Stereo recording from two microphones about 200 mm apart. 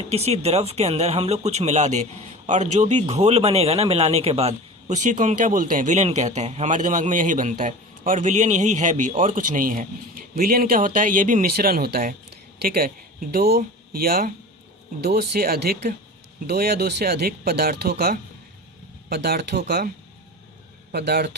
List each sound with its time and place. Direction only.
0.1 s a man's voice: 30° right (ahead or behind); by 19.9 s 55° right (ahead or behind)
20.9 s speech: 55° right (ahead or behind)